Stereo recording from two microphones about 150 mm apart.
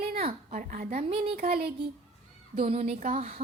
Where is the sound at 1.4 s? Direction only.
90° right.